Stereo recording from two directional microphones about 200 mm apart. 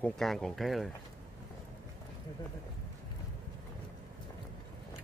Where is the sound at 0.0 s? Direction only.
Centre (ahead or behind).